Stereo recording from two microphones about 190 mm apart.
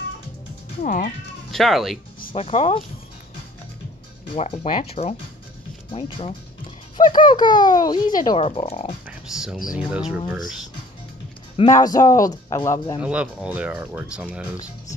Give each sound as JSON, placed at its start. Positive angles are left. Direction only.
{"t": 0.8, "sound": "speech", "side_deg": 45}
{"t": 1.5, "sound": "speech", "side_deg": 0}
{"t": 2.3, "sound": "speech", "side_deg": 35}
{"t": 4.4, "sound": "a man's voice", "side_deg": 30}
{"t": 9.8, "sound": "speech", "side_deg": -5}
{"t": 11.5, "sound": "a man's voice", "side_deg": 20}
{"t": 13.0, "sound": "speech", "side_deg": -5}